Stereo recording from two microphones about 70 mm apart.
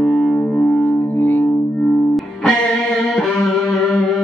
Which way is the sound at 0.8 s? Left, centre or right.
Left.